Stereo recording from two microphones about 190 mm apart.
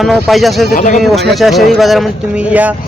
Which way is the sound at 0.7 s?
40° left (ahead or behind).